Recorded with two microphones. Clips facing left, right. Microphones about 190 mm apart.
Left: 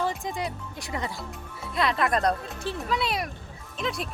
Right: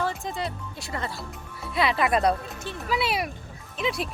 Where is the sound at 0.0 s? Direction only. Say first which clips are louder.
Even; 15° left (ahead or behind).